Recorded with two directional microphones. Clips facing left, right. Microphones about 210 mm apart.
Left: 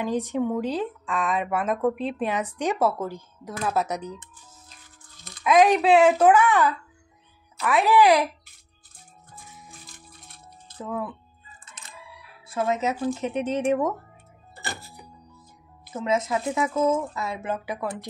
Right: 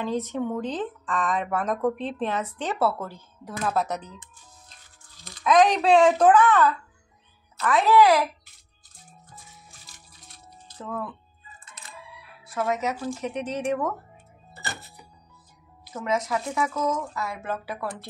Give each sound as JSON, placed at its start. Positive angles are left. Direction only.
{"t": 0.0, "sound": "a woman's voice", "side_deg": 15}
{"t": 5.4, "sound": "a woman's voice", "side_deg": 5}
{"t": 9.8, "sound": "a sound", "side_deg": 55}
{"t": 10.8, "sound": "a woman's voice", "side_deg": 15}
{"t": 12.4, "sound": "speech", "side_deg": 25}
{"t": 15.9, "sound": "speech", "side_deg": 25}